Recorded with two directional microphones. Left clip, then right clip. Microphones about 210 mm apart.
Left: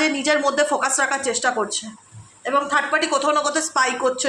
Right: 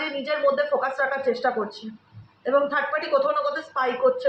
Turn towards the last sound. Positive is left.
turn(degrees=55)  # may be behind; listen again after turning